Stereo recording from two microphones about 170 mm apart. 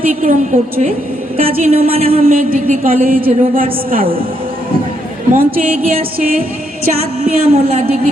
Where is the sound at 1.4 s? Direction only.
35° right (ahead or behind).